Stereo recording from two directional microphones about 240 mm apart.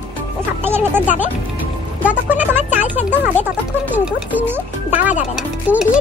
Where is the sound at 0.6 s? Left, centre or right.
Centre.